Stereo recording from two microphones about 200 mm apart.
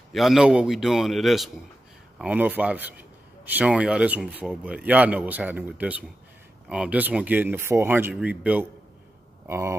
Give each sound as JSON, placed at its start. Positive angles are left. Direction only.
{"t": 0.1, "sound": "a man's voice", "side_deg": 0}